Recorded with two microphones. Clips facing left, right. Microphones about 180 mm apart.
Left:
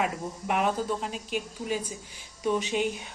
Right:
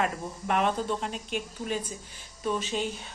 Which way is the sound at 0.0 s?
10° left (ahead or behind).